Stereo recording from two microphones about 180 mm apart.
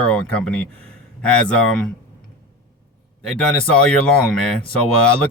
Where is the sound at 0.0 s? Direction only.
5° left (ahead or behind).